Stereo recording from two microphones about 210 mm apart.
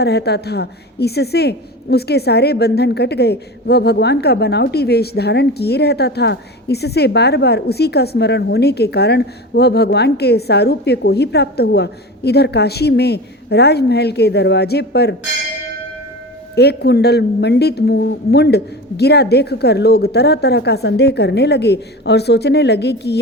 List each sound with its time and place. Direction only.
0.0 s a woman's voice: 50° left (ahead or behind)
16.6 s a woman's voice: 50° left (ahead or behind)